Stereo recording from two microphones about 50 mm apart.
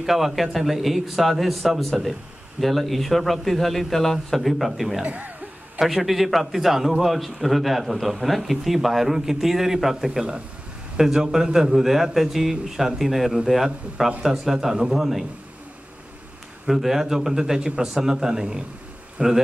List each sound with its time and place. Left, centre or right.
0.0 s a man's voice: centre
5.0 s speech: right
5.8 s a man's voice: centre
16.6 s a man's voice: centre